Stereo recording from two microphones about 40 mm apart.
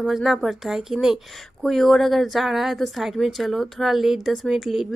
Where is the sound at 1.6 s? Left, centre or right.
Centre.